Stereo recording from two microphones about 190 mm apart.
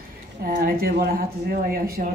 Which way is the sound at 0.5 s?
50° right (ahead or behind).